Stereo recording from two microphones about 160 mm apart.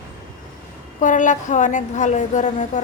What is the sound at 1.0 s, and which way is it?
Speech, 50° left (ahead or behind).